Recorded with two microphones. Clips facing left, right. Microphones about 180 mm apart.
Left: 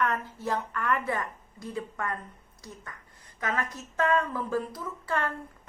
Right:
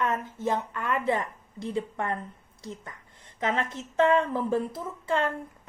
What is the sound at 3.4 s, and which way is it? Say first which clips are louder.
A woman's voice: right 3 dB; 25° right (ahead or behind).